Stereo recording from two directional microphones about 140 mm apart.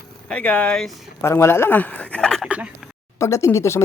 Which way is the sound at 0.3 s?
10° left (ahead or behind).